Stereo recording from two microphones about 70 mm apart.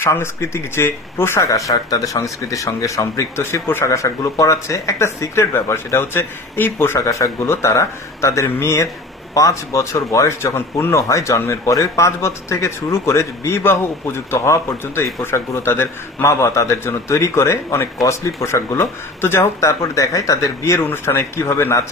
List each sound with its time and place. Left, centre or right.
0.0 s a man's voice: left
1.5 s speech: left
3.8 s speech: left
7.1 s speech: left
9.3 s a man's voice: left
20.8 s a man's voice: left